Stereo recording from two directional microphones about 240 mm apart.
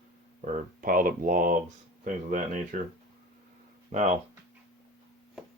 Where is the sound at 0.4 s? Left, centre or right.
Right.